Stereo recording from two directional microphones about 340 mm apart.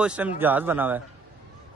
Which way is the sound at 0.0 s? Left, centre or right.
Centre.